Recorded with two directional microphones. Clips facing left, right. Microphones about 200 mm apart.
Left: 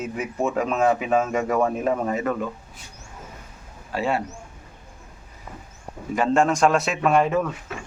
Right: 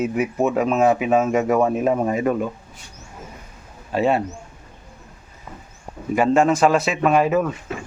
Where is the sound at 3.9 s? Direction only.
20° right (ahead or behind).